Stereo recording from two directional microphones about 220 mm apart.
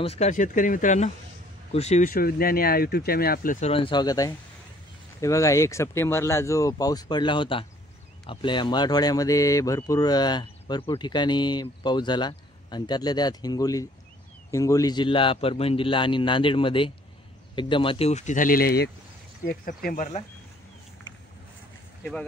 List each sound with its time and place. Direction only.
0.0 s speech: 30° left (ahead or behind)